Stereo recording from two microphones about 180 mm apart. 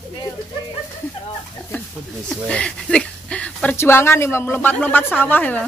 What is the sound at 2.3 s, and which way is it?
Speech, 5° left (ahead or behind).